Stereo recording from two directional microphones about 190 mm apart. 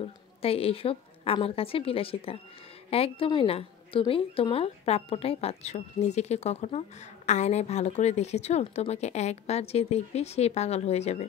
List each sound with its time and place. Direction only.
0.0 s a woman's voice: 30° left (ahead or behind)